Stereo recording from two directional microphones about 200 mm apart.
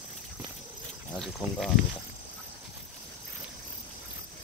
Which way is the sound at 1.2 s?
Centre (ahead or behind).